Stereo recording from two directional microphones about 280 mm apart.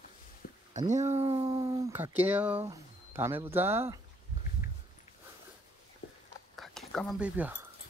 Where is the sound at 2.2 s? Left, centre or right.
Centre.